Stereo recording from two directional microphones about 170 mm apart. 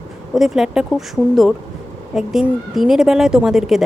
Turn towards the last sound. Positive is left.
turn(degrees=0)  # may be behind; listen again after turning